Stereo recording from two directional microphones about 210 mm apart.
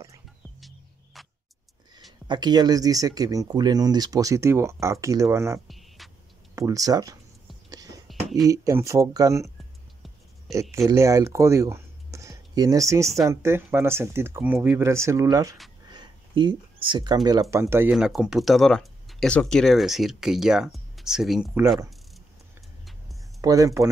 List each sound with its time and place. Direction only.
0.6 s music: centre (ahead or behind)
2.2 s speech: 20° right (ahead or behind)
5.7 s a sound: centre (ahead or behind)
6.5 s speech: 15° right (ahead or behind)
7.7 s whispering: 15° right (ahead or behind)
8.1 s a sound: centre (ahead or behind)
8.5 s speech: 15° right (ahead or behind)
10.5 s speech: 15° right (ahead or behind)
23.4 s speech: 15° right (ahead or behind)